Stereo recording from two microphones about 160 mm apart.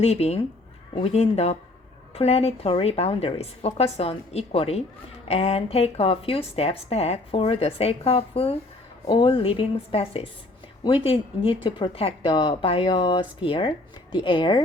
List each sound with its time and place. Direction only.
0.0 s speech: 40° left (ahead or behind)